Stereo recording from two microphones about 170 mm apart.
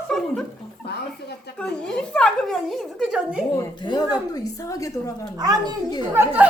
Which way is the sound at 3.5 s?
20° left (ahead or behind).